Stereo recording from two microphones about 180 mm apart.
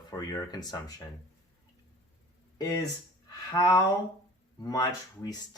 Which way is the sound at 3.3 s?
20° left (ahead or behind).